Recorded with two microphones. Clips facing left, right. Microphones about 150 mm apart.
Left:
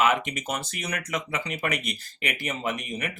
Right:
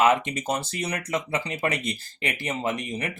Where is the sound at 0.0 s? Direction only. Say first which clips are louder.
Right 3 dB; 30° right (ahead or behind).